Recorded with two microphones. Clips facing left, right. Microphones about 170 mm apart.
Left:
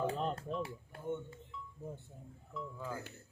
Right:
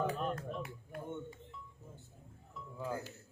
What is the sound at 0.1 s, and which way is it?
Speech, 30° left (ahead or behind).